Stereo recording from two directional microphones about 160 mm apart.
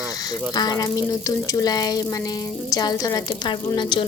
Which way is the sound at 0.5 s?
25° left (ahead or behind).